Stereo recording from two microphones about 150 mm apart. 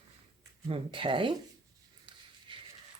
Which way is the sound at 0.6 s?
35° right (ahead or behind).